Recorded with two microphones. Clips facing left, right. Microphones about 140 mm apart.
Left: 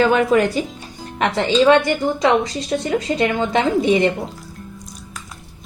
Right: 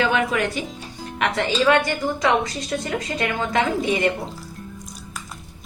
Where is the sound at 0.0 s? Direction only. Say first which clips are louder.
Left 6 dB; 40° left (ahead or behind).